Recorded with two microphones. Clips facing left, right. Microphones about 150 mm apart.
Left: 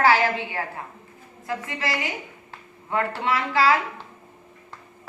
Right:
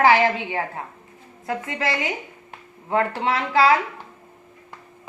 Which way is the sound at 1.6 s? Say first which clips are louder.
Right 4 dB; 25° right (ahead or behind).